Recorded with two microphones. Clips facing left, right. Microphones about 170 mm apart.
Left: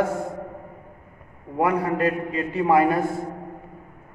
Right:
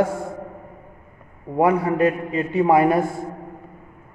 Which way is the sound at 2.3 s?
25° right (ahead or behind).